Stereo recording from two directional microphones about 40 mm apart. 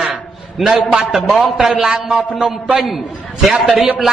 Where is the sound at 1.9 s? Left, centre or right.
Right.